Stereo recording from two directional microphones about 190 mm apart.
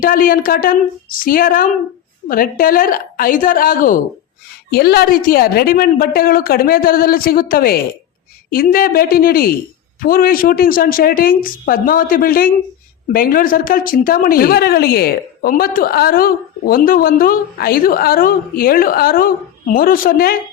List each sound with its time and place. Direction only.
0.0 s a woman's voice: 50° left (ahead or behind)